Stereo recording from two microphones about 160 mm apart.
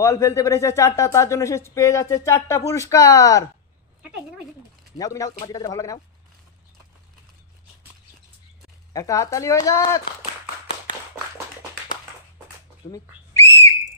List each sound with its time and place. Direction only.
0.0 s speech: 20° left (ahead or behind)
4.9 s speech: 20° left (ahead or behind)
8.9 s speech: 20° left (ahead or behind)
12.9 s whistle: 20° left (ahead or behind)